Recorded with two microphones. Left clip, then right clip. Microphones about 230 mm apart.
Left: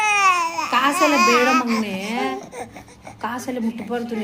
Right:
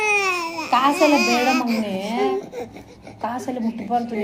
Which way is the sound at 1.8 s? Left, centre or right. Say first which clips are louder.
Right 2 dB; left.